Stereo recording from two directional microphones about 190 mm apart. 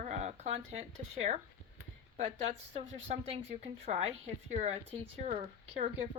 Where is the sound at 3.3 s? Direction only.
35° right (ahead or behind).